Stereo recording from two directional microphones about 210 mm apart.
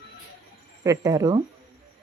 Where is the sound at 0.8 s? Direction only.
15° right (ahead or behind).